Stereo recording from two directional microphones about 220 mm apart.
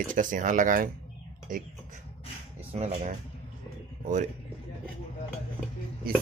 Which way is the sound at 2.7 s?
30° right (ahead or behind).